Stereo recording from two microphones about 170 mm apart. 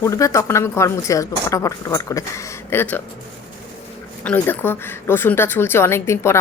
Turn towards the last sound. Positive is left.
turn(degrees=15)  # may be behind; listen again after turning